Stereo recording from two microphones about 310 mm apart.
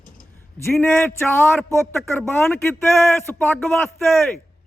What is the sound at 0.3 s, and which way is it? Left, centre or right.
A man's voice, centre.